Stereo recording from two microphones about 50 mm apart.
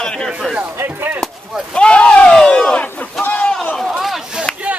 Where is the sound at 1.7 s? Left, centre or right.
Centre.